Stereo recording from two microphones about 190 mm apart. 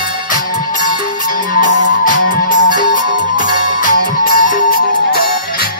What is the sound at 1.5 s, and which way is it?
Music, 45° left (ahead or behind).